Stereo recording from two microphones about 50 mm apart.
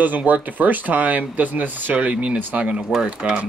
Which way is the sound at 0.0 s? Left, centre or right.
Right.